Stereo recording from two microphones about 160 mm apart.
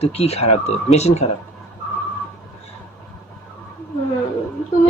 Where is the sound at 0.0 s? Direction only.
40° left (ahead or behind).